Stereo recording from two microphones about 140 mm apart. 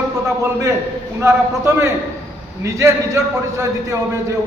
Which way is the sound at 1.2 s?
20° right (ahead or behind).